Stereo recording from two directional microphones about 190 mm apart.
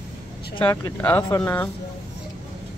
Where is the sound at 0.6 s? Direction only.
10° left (ahead or behind).